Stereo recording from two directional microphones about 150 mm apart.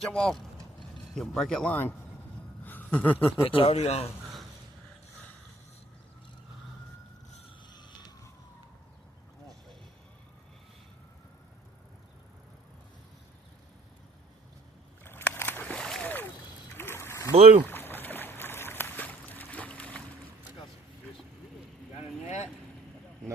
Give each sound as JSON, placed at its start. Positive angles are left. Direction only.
{"t": 0.0, "sound": "speech", "side_deg": 5}
{"t": 3.4, "sound": "speech", "side_deg": 40}
{"t": 7.7, "sound": "emergency vehicle", "side_deg": 30}
{"t": 15.0, "sound": "a sound", "side_deg": 15}
{"t": 16.7, "sound": "ratchet", "side_deg": 15}
{"t": 17.3, "sound": "speech", "side_deg": -45}
{"t": 17.7, "sound": "boat", "side_deg": 15}
{"t": 21.9, "sound": "boat", "side_deg": 50}